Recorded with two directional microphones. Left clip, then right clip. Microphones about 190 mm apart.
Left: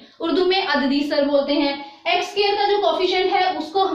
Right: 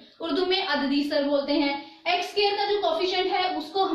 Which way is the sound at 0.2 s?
15° left (ahead or behind).